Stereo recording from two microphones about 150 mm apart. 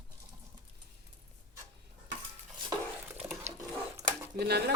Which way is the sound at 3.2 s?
20° right (ahead or behind).